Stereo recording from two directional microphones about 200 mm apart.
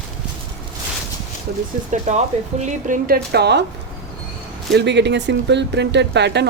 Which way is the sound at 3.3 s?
55° right (ahead or behind).